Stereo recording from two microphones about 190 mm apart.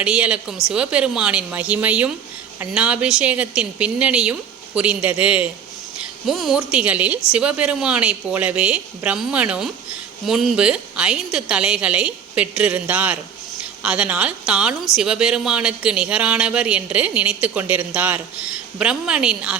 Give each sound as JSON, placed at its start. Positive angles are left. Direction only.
{"t": 0.0, "sound": "a woman's voice", "side_deg": -5}